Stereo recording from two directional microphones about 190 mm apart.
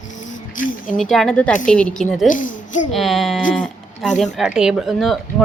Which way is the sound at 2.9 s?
Centre (ahead or behind).